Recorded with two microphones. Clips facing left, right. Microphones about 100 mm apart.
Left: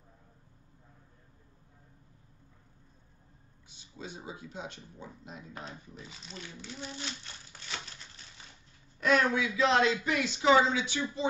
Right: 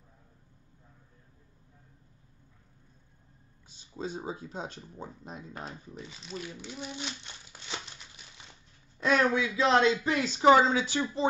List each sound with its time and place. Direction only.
3.9 s speech: 40° right (ahead or behind)
5.7 s speech: centre (ahead or behind)
6.6 s a child's voice: 15° right (ahead or behind)
9.0 s speech: 25° right (ahead or behind)